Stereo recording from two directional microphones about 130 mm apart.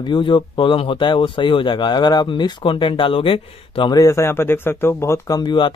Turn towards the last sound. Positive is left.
turn(degrees=35)  # may be behind; listen again after turning